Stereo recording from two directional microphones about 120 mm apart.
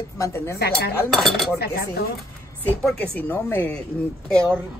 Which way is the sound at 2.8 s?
10° left (ahead or behind).